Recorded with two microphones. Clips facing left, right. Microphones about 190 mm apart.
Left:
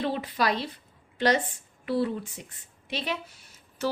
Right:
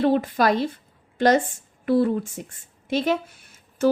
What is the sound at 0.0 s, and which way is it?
A woman's voice, 45° right (ahead or behind).